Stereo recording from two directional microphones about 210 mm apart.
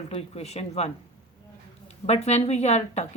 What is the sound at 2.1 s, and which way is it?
A woman's voice, 30° left (ahead or behind).